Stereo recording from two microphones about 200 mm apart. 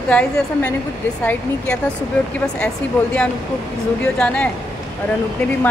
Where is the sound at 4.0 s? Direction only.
5° left (ahead or behind).